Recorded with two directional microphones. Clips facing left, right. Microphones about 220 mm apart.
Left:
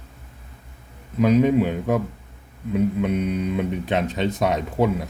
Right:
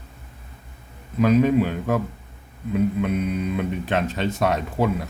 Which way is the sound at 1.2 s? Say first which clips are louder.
Even; 20° left (ahead or behind).